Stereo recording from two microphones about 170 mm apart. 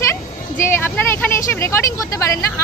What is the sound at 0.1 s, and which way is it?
A woman's voice, 15° left (ahead or behind).